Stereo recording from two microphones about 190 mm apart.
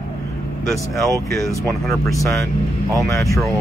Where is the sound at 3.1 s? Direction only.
15° left (ahead or behind).